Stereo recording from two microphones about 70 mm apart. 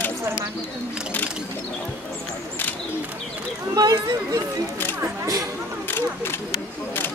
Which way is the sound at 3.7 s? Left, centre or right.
Right.